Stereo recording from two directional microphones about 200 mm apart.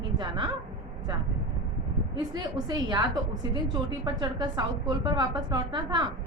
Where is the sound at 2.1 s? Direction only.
20° right (ahead or behind).